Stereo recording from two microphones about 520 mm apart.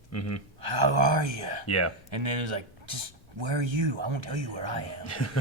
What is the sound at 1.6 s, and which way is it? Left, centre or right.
Speech, left.